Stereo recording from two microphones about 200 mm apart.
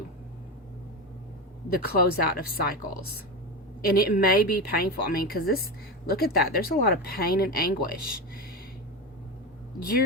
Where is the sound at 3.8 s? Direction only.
45° left (ahead or behind).